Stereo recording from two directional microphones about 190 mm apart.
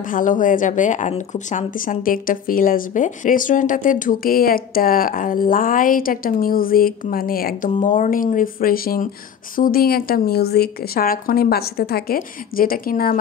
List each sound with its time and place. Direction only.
0.1 s a woman's voice: 45° left (ahead or behind)